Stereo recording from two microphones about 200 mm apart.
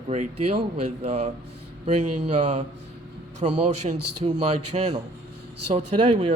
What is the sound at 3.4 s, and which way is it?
Speech, 30° right (ahead or behind).